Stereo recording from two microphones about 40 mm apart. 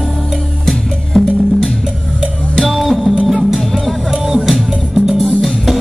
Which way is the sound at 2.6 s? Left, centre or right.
Centre.